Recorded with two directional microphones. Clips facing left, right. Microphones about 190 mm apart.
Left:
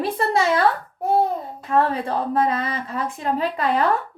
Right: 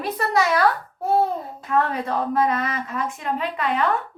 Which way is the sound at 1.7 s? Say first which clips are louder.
Left 2 dB; 30° left (ahead or behind).